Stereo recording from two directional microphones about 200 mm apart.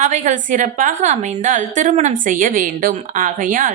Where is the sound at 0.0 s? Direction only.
35° right (ahead or behind).